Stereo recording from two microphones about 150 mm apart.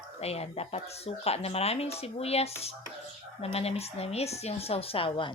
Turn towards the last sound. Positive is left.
turn(degrees=35)  # may be behind; listen again after turning